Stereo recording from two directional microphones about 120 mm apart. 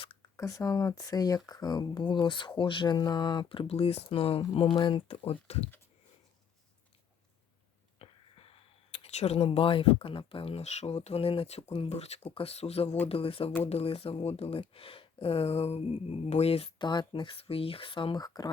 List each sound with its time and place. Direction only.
0.3 s speech: 25° left (ahead or behind); by 5.6 s 55° left (ahead or behind)
7.9 s speech: 50° left (ahead or behind)
16.7 s speech: 40° left (ahead or behind)